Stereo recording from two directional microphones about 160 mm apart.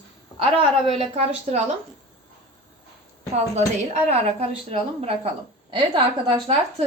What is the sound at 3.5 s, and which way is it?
A woman's voice, 45° right (ahead or behind).